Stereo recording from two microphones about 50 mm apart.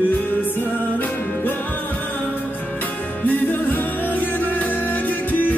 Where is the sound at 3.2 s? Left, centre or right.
Left.